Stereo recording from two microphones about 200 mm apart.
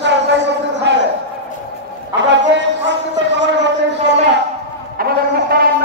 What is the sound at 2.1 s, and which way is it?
A man's voice, 60° right (ahead or behind).